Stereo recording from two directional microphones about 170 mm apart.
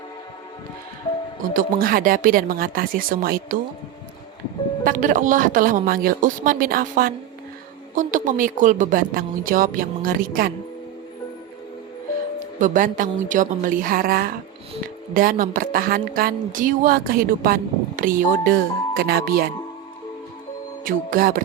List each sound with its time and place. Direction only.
1.5 s a woman's voice: 55° right (ahead or behind)
4.8 s a woman's voice: 50° right (ahead or behind)
12.5 s a woman's voice: 50° right (ahead or behind)
20.8 s a woman's voice: 55° right (ahead or behind)